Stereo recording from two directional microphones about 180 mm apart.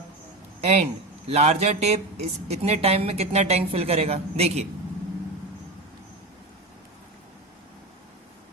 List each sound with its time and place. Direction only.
0.6 s a woman's voice: 35° right (ahead or behind)